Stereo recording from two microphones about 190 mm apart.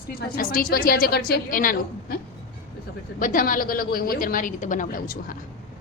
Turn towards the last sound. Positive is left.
turn(degrees=45)  # may be behind; listen again after turning